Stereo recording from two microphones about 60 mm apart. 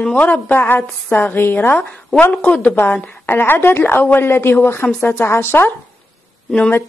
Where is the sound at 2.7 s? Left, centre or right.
Left.